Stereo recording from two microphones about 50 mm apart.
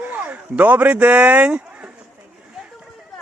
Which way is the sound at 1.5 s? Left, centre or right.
Right.